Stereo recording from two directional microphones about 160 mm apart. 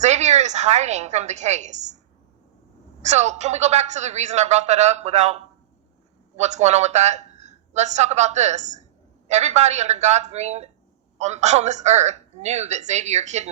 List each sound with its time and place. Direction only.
0.0 s a woman's voice: 45° right (ahead or behind)
3.0 s a woman's voice: 45° right (ahead or behind)